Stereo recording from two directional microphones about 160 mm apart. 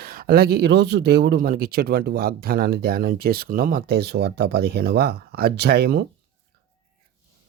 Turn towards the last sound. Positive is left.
turn(degrees=-90)